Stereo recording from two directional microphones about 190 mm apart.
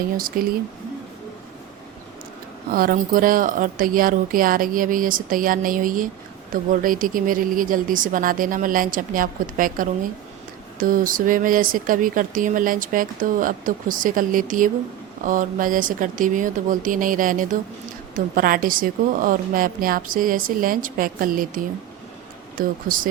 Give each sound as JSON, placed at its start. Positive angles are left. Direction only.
{"t": 0.2, "sound": "speech", "side_deg": -50}
{"t": 2.7, "sound": "speech", "side_deg": -50}